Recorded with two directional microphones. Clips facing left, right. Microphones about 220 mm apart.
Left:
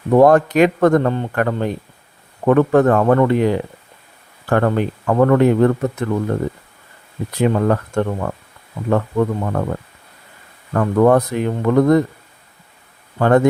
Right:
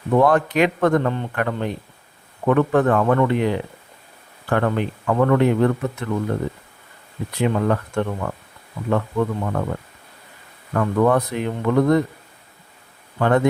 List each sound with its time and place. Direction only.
0.1 s speech: 45° left (ahead or behind)
7.3 s speech: 45° left (ahead or behind)
10.8 s speech: 45° left (ahead or behind)
13.1 s speech: 45° left (ahead or behind)